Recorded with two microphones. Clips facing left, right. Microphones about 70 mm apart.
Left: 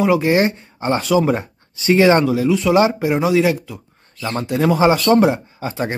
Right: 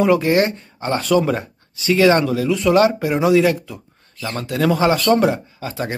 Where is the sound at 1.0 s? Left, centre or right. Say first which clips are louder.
Even; centre.